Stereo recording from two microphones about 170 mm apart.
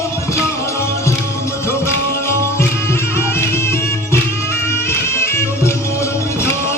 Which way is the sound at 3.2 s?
15° left (ahead or behind).